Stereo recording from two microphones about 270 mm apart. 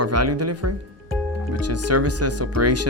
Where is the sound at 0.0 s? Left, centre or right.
Right.